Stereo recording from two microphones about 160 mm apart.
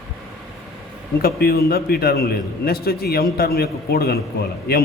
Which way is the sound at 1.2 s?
75° left (ahead or behind).